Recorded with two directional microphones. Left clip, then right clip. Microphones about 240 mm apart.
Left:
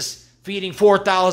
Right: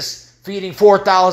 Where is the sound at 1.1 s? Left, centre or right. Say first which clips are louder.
Right 5 dB; left.